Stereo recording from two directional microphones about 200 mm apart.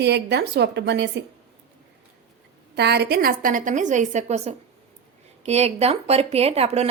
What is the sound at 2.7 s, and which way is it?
A woman's voice, 55° right (ahead or behind).